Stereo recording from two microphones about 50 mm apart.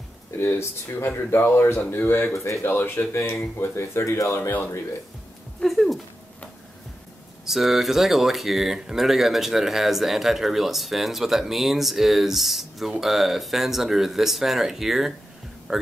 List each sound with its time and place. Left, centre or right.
0.6 s speech: left
2.3 s speech: left
2.6 s speech: left
3.7 s speech: left
4.4 s speech: left
5.6 s speech: centre
7.4 s speech: centre